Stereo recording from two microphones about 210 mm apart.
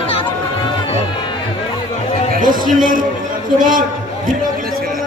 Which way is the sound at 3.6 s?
40° right (ahead or behind).